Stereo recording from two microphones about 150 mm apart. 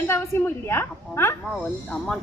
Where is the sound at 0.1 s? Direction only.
15° left (ahead or behind).